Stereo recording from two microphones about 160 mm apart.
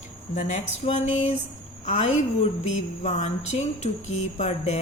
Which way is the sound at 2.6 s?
45° left (ahead or behind).